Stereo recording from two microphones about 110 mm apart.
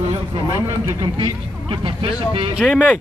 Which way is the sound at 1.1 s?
50° right (ahead or behind).